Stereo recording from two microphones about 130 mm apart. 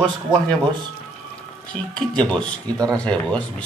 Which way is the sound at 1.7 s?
5° left (ahead or behind).